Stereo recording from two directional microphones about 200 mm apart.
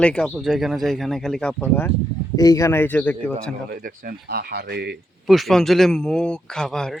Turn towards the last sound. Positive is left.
turn(degrees=5)  # may be behind; listen again after turning